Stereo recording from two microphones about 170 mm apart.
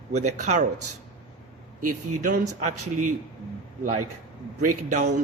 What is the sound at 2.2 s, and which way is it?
Speech, 45° right (ahead or behind).